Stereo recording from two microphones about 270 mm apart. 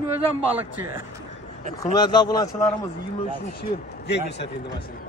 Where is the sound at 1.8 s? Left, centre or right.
Centre.